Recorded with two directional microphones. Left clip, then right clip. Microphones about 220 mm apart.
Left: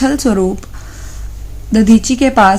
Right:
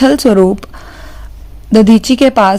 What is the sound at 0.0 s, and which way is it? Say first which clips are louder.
Speech: right 6 dB; 40° right (ahead or behind).